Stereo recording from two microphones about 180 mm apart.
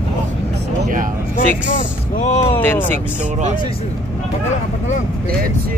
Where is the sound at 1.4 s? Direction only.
45° left (ahead or behind).